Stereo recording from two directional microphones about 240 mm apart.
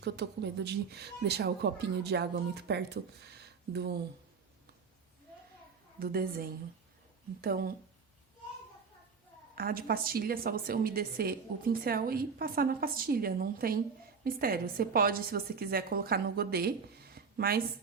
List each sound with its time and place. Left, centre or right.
0.0 s speech: right
6.0 s a woman's voice: right
9.6 s a woman's voice: right